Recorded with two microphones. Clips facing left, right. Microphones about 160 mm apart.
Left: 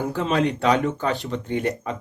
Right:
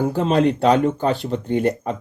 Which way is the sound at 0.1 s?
35° right (ahead or behind).